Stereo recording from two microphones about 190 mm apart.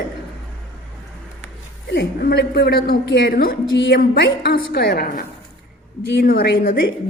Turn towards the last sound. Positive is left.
turn(degrees=55)  # may be behind; listen again after turning